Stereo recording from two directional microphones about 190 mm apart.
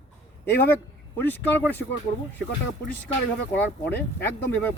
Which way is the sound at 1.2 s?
10° left (ahead or behind).